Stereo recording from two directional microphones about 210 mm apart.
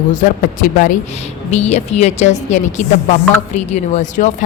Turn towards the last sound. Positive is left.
turn(degrees=35)  # may be behind; listen again after turning